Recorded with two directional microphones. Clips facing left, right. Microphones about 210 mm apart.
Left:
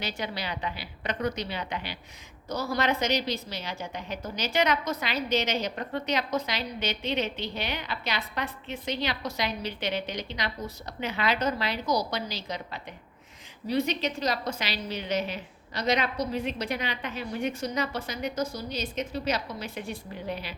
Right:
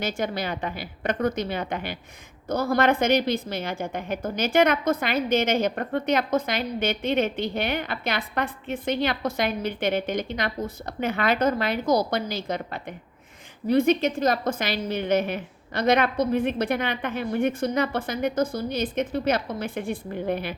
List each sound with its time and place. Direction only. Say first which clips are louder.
0.0 s a woman's voice: right 6 dB; 50° right (ahead or behind)